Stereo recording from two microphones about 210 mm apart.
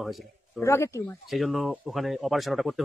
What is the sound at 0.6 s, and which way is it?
Speech, 15° left (ahead or behind).